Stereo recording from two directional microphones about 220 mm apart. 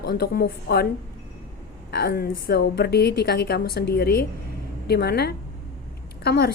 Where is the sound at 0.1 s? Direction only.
45° left (ahead or behind).